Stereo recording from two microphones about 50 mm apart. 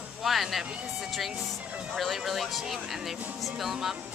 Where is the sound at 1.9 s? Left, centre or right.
Centre.